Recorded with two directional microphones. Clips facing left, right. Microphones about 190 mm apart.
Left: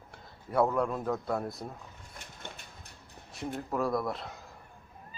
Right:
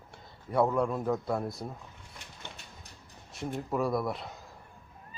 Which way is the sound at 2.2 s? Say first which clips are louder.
Left 2 dB; 50° left (ahead or behind).